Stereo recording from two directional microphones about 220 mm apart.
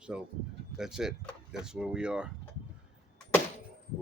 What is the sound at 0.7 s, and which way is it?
Speech, centre (ahead or behind).